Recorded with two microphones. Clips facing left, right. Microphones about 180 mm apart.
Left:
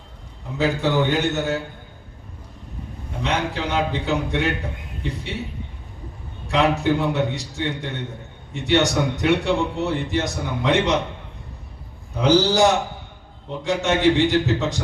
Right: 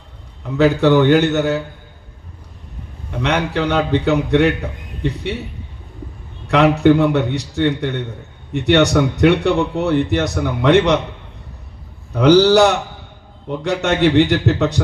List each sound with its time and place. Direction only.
0.5 s a man's voice: 65° right (ahead or behind)
3.2 s a man's voice: 65° right (ahead or behind)
6.5 s a man's voice: 65° right (ahead or behind)
12.1 s a man's voice: 65° right (ahead or behind)